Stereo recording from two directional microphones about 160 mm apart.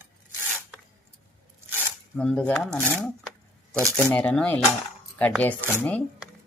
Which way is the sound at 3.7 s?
20° right (ahead or behind).